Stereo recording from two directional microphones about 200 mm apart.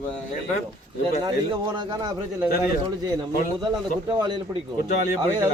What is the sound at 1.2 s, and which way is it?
Speech, 20° right (ahead or behind).